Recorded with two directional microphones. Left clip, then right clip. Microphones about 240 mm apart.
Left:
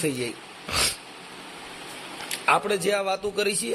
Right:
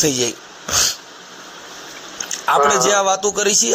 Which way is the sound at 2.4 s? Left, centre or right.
Centre.